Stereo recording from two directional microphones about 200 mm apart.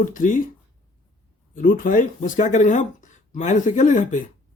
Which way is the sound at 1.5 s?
40° left (ahead or behind).